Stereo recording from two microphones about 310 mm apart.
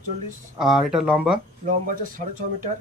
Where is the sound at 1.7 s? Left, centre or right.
Right.